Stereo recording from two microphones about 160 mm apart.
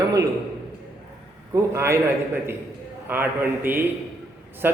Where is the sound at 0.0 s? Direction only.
20° right (ahead or behind).